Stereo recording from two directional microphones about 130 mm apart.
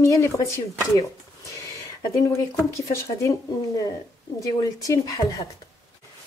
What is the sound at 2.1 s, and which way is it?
A woman's voice, 25° left (ahead or behind).